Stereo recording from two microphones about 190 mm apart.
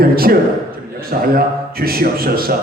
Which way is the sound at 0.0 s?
50° right (ahead or behind).